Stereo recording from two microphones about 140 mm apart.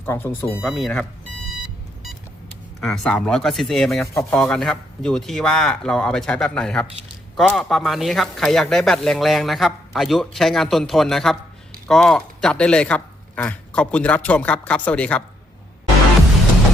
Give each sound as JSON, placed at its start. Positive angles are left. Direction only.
{"t": 0.0, "sound": "speech", "side_deg": 15}
{"t": 0.6, "sound": "speech", "side_deg": 0}
{"t": 2.8, "sound": "speech", "side_deg": 5}